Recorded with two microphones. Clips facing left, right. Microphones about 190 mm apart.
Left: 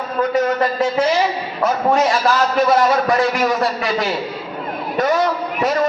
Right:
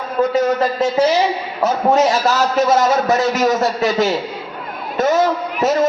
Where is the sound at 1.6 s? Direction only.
25° right (ahead or behind).